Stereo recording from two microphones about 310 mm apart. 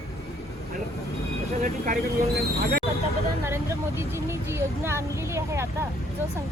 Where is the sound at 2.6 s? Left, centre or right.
Right.